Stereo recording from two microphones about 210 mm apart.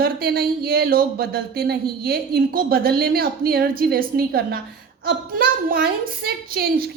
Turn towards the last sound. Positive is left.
turn(degrees=-45)  # may be behind; listen again after turning